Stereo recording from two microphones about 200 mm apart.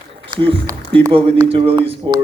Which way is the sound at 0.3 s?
25° right (ahead or behind).